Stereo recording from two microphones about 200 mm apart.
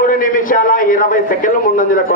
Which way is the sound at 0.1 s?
40° left (ahead or behind).